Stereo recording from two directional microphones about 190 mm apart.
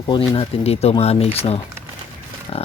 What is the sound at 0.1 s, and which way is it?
Speech, 30° left (ahead or behind).